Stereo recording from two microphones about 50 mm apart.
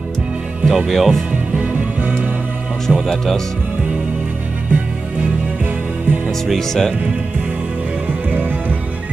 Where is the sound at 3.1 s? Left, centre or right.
Centre.